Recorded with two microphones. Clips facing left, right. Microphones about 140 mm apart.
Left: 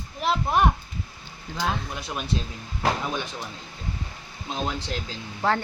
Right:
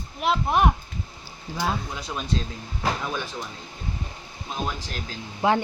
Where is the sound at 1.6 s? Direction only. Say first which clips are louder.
Right 1 dB; 5° right (ahead or behind).